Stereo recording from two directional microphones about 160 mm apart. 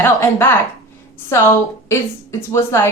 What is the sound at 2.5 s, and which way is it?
Speech, 15° left (ahead or behind).